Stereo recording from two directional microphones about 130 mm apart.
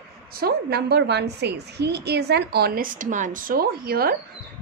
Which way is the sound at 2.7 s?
90° right.